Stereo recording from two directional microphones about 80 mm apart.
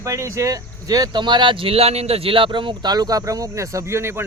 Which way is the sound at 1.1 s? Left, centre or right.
Right.